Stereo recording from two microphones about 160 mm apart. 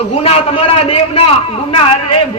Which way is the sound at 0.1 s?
40° left (ahead or behind).